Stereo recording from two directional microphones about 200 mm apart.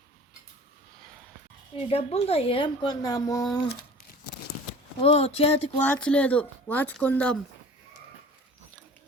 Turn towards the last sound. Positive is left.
turn(degrees=5)  # may be behind; listen again after turning